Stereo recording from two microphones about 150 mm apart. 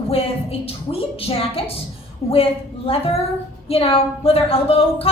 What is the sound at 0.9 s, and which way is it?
A woman's voice, 40° left (ahead or behind).